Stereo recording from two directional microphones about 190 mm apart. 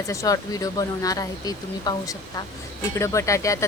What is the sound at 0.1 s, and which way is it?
Speech, 15° left (ahead or behind).